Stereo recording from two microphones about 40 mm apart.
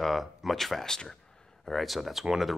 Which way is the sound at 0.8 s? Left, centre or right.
Centre.